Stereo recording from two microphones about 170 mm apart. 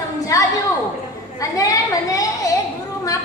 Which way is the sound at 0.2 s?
20° left (ahead or behind).